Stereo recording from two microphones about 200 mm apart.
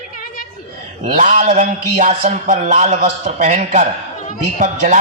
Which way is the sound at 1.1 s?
40° right (ahead or behind).